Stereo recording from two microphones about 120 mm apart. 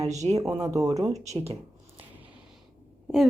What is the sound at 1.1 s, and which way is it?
Speech, 60° right (ahead or behind).